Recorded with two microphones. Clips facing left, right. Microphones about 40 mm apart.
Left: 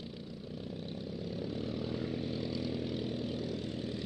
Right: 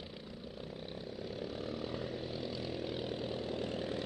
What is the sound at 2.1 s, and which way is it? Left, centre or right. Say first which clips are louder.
Vehicle: left 3 dB; centre.